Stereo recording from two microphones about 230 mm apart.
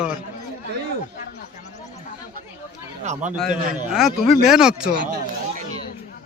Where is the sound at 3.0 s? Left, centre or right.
Right.